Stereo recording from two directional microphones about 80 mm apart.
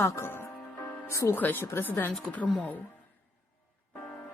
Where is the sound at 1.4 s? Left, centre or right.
Left.